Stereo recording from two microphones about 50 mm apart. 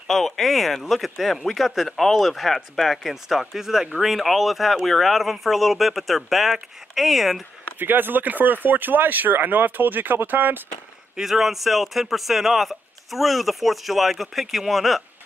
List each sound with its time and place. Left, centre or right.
0.1 s a man's voice: centre
7.8 s speech: right
11.1 s a man's voice: centre